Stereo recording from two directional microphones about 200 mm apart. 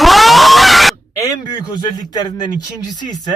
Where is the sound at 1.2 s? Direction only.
20° left (ahead or behind).